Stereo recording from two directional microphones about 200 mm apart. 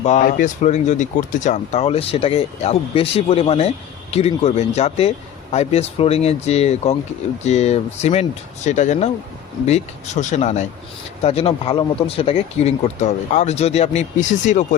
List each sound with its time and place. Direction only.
0.0 s speech: 40° left (ahead or behind)